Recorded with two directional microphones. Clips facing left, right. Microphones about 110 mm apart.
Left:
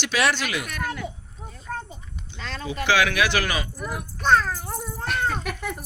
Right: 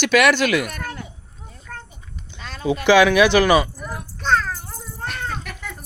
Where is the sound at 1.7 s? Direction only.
20° left (ahead or behind).